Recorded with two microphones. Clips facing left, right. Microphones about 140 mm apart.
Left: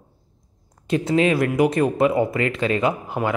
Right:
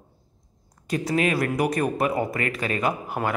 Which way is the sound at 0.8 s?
25° left (ahead or behind).